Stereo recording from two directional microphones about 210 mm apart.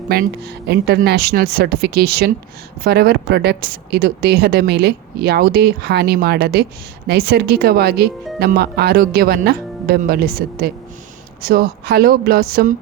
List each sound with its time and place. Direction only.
0.7 s speech: 50° right (ahead or behind)